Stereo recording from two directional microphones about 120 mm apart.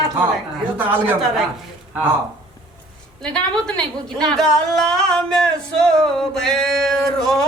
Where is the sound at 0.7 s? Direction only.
15° right (ahead or behind).